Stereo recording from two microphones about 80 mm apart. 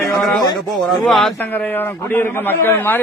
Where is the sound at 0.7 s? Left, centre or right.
Centre.